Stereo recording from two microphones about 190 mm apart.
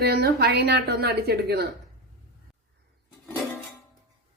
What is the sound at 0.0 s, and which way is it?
Speech, 60° right (ahead or behind).